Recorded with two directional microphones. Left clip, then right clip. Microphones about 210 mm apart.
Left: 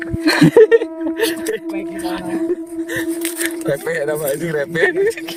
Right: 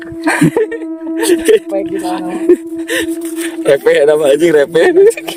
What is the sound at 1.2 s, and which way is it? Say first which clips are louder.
Speech: right 12 dB; 35° right (ahead or behind).